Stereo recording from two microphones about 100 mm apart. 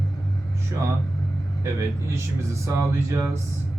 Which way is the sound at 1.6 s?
30° right (ahead or behind).